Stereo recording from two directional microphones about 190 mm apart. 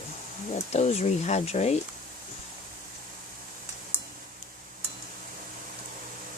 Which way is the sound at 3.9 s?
10° right (ahead or behind).